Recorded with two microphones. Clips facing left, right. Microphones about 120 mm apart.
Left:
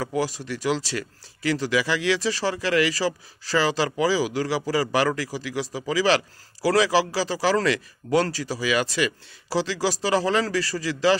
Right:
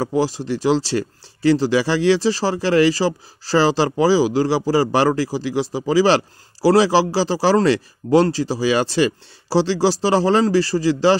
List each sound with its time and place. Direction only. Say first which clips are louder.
0.0 s speech: right 6 dB; 30° right (ahead or behind)